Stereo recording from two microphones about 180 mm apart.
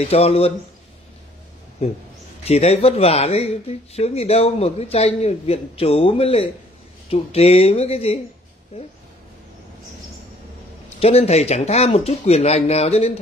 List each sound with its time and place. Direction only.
0.0 s speech: 35° left (ahead or behind)
1.8 s speech: 35° left (ahead or behind)
11.0 s speech: 35° left (ahead or behind)